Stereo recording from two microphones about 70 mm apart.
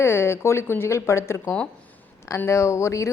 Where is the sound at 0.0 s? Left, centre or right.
Left.